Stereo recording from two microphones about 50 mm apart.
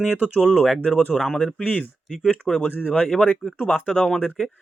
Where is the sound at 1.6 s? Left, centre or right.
Left.